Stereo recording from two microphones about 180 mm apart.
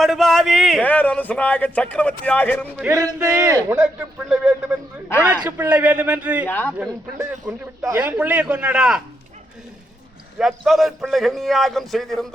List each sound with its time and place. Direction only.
0.0 s a man's voice: centre (ahead or behind)
3.2 s a man's voice: 15° right (ahead or behind)
4.3 s a man's voice: 5° right (ahead or behind)
6.5 s a man's voice: 10° left (ahead or behind)
6.8 s speech: 20° right (ahead or behind)
7.8 s a man's voice: 10° right (ahead or behind)
10.3 s a man's voice: centre (ahead or behind)